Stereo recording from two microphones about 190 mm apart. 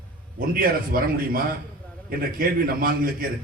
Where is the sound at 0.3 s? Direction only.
50° right (ahead or behind).